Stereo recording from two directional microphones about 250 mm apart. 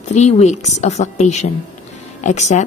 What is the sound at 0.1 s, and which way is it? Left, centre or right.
A woman's voice, left.